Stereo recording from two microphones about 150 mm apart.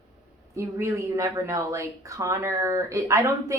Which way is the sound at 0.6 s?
20° right (ahead or behind).